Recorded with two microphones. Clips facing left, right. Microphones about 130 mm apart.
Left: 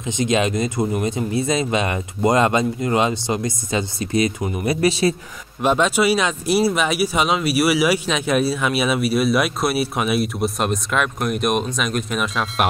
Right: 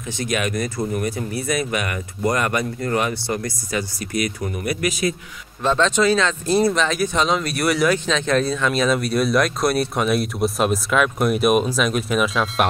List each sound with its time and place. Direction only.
0.0 s speech: 20° left (ahead or behind)
5.6 s speech: 15° left (ahead or behind)